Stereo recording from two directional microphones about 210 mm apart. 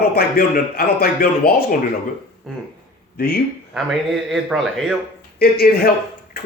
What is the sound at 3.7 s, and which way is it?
A man's voice, centre (ahead or behind).